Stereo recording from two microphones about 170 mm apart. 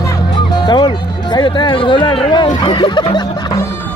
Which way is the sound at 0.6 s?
25° left (ahead or behind).